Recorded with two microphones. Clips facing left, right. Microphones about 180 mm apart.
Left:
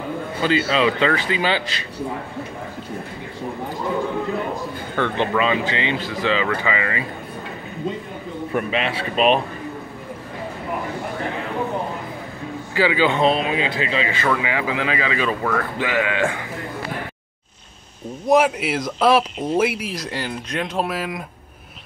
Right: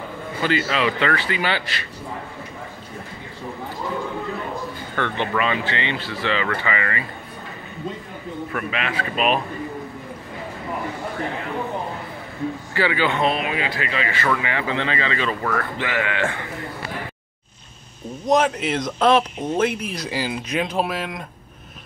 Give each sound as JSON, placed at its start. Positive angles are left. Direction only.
{"t": 0.4, "sound": "speech", "side_deg": 20}
{"t": 4.9, "sound": "speech", "side_deg": 15}
{"t": 8.5, "sound": "speech", "side_deg": 30}
{"t": 12.7, "sound": "speech", "side_deg": 15}
{"t": 18.2, "sound": "speech", "side_deg": 5}